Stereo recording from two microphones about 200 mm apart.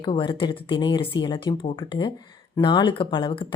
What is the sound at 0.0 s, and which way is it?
A woman's voice, 25° left (ahead or behind).